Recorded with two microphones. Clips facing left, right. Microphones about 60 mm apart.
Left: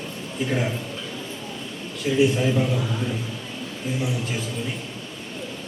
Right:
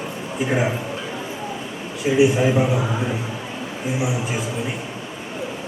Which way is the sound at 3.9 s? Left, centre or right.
Centre.